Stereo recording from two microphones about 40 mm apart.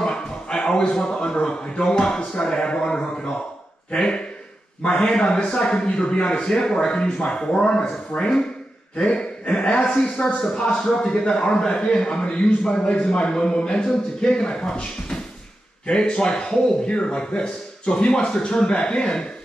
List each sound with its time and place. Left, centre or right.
0.0 s a man's voice: centre
8.1 s speech: left
8.9 s a man's voice: left
10.8 s a man's voice: centre